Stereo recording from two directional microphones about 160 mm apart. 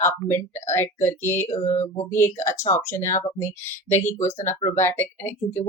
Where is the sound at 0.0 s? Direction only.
15° left (ahead or behind).